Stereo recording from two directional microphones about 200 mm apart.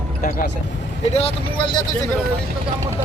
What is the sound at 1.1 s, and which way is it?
Speech, 30° left (ahead or behind).